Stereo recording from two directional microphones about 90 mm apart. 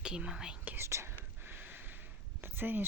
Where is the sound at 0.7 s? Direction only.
30° right (ahead or behind).